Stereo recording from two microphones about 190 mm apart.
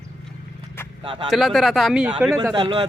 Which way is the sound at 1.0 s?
25° right (ahead or behind).